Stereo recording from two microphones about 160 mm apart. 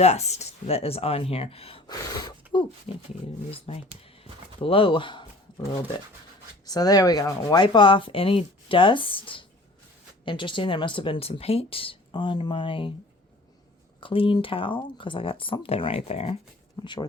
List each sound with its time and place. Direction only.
0.0 s speech: 45° left (ahead or behind)
1.9 s gasp: 25° left (ahead or behind)
3.7 s speech: 40° left (ahead or behind)
6.7 s speech: 25° left (ahead or behind)
14.0 s speech: 35° left (ahead or behind)
16.8 s gasp: 30° left (ahead or behind)